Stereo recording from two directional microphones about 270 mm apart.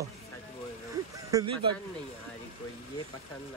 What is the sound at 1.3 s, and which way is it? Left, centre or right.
Speech, centre.